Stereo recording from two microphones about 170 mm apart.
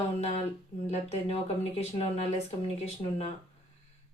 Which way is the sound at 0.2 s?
40° left (ahead or behind).